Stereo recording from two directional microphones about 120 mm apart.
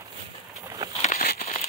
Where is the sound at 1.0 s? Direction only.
70° left (ahead or behind).